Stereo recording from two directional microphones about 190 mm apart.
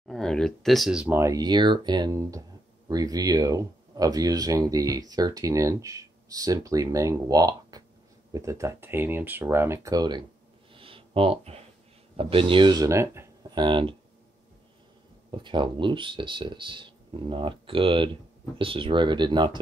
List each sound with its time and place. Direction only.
0.1 s speech: 5° left (ahead or behind); by 10.2 s 20° right (ahead or behind)
10.7 s a sound: 30° right (ahead or behind)
12.2 s speech: 30° right (ahead or behind); by 13.7 s 15° right (ahead or behind)
13.7 s speech: 25° right (ahead or behind)
15.4 s speech: 25° right (ahead or behind)